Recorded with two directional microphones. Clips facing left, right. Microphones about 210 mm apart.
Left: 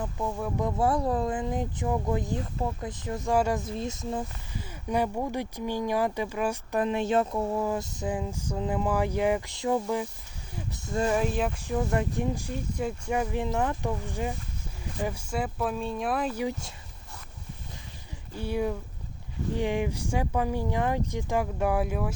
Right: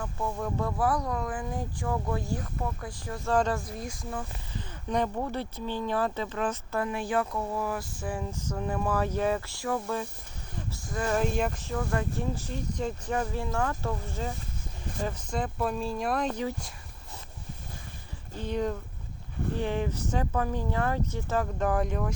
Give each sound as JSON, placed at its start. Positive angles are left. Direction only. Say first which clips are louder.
{"t": 0.0, "sound": "speech", "louder": "left 1 dB", "side_deg": 15}
{"t": 0.6, "sound": "speech", "louder": "left 3 dB", "side_deg": 25}
{"t": 3.3, "sound": "speech", "louder": "left 1 dB", "side_deg": 10}
{"t": 3.6, "sound": "speech", "louder": "left 5 dB", "side_deg": 25}
{"t": 4.5, "sound": "speech", "louder": "left 1 dB", "side_deg": 10}
{"t": 11.1, "sound": "speech", "louder": "right 3 dB", "side_deg": 0}
{"t": 11.6, "sound": "speech", "louder": "left 3 dB", "side_deg": 20}
{"t": 18.3, "sound": "speech", "louder": "left 1 dB", "side_deg": 10}